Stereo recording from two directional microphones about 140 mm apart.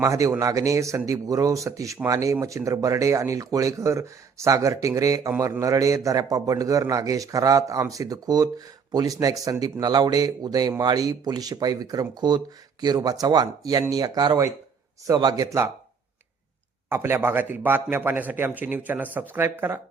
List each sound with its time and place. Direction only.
0.0 s a man's voice: 25° right (ahead or behind)
16.9 s a man's voice: 15° right (ahead or behind)